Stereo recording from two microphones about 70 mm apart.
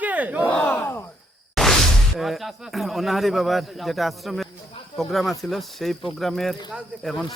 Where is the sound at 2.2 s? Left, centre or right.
Centre.